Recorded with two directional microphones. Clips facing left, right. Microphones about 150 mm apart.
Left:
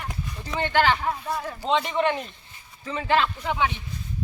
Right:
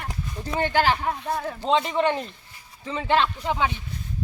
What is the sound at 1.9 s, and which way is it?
Speech, 30° right (ahead or behind).